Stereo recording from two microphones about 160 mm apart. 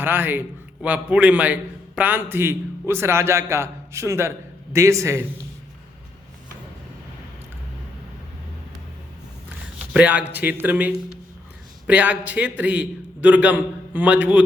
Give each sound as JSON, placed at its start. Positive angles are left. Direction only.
{"t": 0.0, "sound": "a man's voice", "side_deg": -10}
{"t": 9.9, "sound": "a man's voice", "side_deg": -10}